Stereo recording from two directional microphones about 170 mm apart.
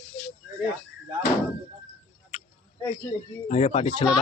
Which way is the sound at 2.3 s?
50° left (ahead or behind).